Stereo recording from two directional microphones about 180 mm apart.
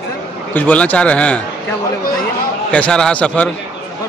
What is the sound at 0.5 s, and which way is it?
Speech, 10° left (ahead or behind).